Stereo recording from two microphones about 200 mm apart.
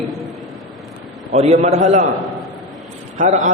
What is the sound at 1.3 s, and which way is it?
Speech, 35° right (ahead or behind).